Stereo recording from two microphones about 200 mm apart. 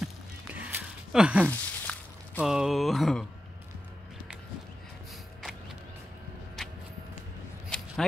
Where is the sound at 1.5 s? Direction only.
10° left (ahead or behind).